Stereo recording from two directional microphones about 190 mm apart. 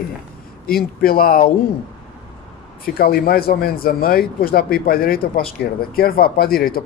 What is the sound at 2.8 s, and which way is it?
Speech, 50° left (ahead or behind).